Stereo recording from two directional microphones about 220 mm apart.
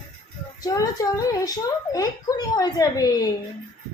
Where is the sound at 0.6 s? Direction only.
15° left (ahead or behind).